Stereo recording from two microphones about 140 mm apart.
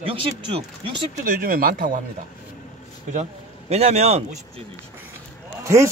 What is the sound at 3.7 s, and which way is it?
Speech, 50° right (ahead or behind).